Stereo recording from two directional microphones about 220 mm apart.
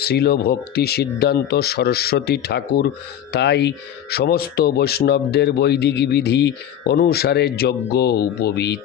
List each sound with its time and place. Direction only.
0.0 s speech: 45° left (ahead or behind)